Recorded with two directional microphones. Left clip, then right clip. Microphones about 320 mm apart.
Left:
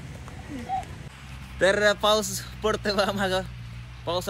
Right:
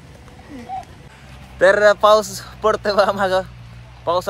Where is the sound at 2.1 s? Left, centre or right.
Centre.